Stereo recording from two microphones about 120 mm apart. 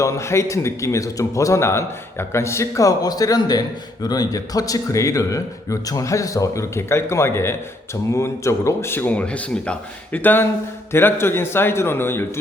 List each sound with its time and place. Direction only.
0.0 s a man's voice: 25° left (ahead or behind)